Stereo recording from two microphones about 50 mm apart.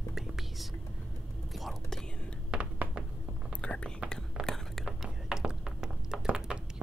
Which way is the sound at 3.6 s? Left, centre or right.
Left.